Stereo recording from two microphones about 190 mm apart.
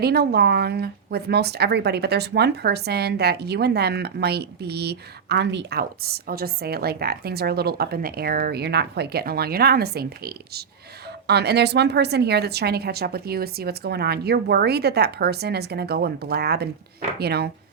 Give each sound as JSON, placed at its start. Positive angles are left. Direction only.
{"t": 0.0, "sound": "speech", "side_deg": -55}